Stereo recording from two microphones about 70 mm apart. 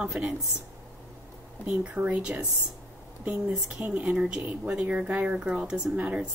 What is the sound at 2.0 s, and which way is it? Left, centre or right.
Speech, right.